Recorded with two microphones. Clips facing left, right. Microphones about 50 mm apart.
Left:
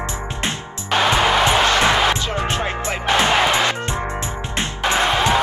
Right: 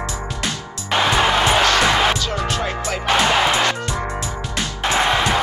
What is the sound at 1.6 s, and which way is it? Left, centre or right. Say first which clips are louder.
Basketball bounce: even; left.